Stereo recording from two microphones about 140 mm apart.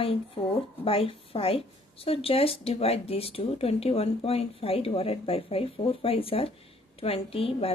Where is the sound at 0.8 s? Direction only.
40° left (ahead or behind).